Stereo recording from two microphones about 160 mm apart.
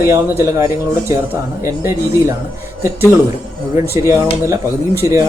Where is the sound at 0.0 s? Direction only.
15° right (ahead or behind).